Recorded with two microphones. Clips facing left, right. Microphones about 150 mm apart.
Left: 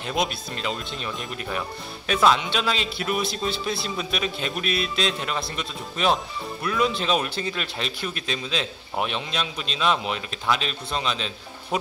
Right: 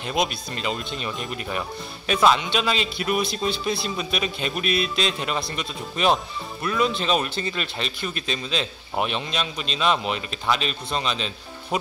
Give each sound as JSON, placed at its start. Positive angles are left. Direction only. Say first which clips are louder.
{"t": 0.0, "sound": "speech", "louder": "right 1 dB", "side_deg": 0}